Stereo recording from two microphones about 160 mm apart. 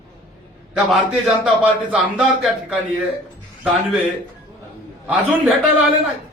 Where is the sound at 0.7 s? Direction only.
Centre (ahead or behind).